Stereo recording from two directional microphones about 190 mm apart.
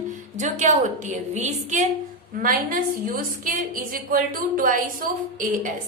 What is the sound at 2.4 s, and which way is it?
A woman's voice, 50° right (ahead or behind).